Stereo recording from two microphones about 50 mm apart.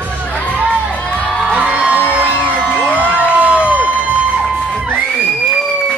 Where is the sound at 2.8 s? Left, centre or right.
Left.